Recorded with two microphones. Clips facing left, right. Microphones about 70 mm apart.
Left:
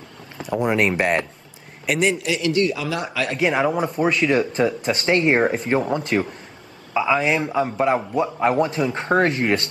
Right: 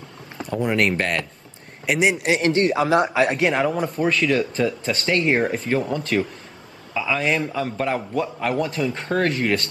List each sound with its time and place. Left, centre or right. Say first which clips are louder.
0.5 s speech: left 1 dB; centre
1.9 s speech: even; centre
2.3 s a man's voice: right 2 dB; right
3.3 s speech: left 1 dB; centre
4.0 s speech: left 1 dB; left
6.9 s a sound: left 5 dB; left
7.3 s speech: left 3 dB; left